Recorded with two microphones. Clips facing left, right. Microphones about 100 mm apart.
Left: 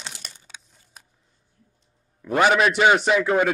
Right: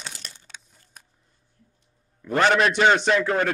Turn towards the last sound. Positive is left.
turn(degrees=10)  # may be behind; listen again after turning